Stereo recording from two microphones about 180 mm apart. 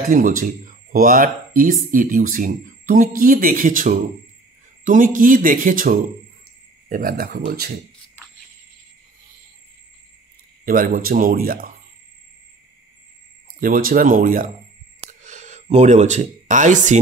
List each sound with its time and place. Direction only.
0.1 s speech: 45° right (ahead or behind)
10.6 s speech: 50° right (ahead or behind)
13.6 s speech: 50° right (ahead or behind)
15.0 s a sound: 40° right (ahead or behind)